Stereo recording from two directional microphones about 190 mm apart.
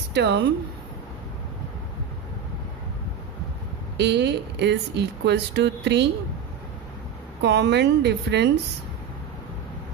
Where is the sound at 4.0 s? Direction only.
65° right (ahead or behind).